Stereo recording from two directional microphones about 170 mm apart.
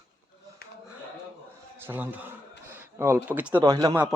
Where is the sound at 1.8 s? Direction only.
10° right (ahead or behind).